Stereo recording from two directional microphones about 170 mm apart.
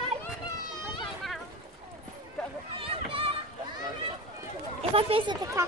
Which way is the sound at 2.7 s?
30° right (ahead or behind).